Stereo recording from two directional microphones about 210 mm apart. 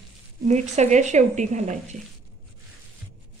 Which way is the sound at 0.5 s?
35° right (ahead or behind).